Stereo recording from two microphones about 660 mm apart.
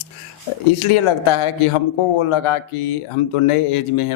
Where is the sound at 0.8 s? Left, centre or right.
Left.